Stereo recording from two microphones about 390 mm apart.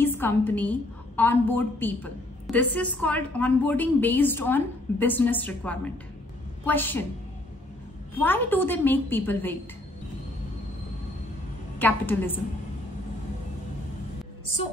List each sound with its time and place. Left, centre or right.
0.0 s a woman's voice: centre
8.1 s a woman's voice: centre
11.8 s a woman's voice: centre